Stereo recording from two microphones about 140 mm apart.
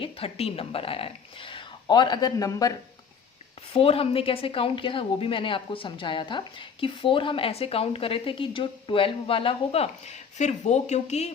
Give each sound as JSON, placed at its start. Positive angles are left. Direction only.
{"t": 0.0, "sound": "a woman's voice", "side_deg": 45}
{"t": 3.7, "sound": "a woman's voice", "side_deg": 40}